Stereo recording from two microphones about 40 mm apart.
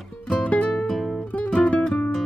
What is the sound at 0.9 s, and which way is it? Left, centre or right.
Music, centre.